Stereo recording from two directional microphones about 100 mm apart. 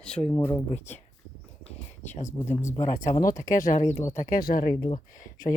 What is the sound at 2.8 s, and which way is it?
Speech, 90° left.